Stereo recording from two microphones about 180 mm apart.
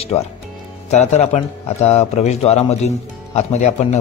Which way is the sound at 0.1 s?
35° left (ahead or behind).